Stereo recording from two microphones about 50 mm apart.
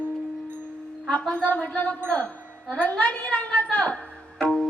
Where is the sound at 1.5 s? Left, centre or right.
Left.